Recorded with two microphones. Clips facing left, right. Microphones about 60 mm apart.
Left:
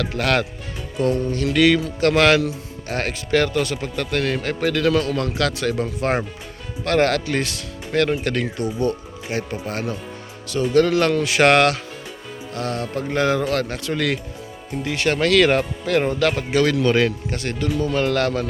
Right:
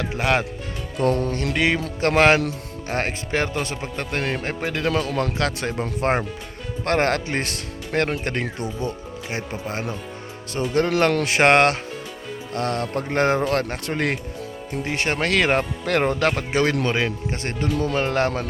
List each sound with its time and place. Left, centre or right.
0.0 s speech: centre
0.9 s speech: right
1.5 s speech: right
12.5 s speech: right
15.8 s speech: right
16.5 s speech: right